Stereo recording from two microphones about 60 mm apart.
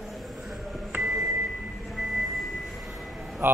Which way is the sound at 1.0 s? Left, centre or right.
Centre.